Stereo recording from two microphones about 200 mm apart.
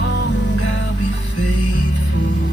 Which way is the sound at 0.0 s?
60° left (ahead or behind).